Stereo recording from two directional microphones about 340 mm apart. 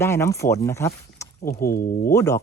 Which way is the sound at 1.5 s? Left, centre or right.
Left.